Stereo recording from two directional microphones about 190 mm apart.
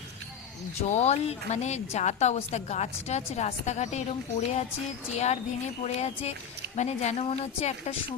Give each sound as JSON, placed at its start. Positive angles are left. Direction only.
{"t": 0.8, "sound": "a woman's voice", "side_deg": 35}